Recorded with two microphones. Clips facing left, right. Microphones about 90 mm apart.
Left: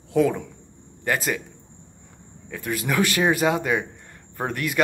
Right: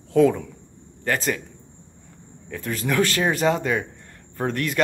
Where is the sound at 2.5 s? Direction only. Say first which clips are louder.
Right 1 dB; 10° left (ahead or behind).